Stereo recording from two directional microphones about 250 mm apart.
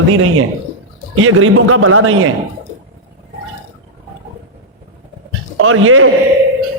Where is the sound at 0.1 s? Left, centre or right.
Right.